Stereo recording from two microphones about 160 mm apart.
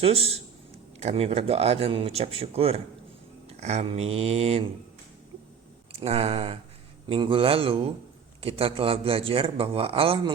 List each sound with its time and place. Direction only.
0.0 s a man's voice: 40° right (ahead or behind)
6.0 s a man's voice: 40° right (ahead or behind)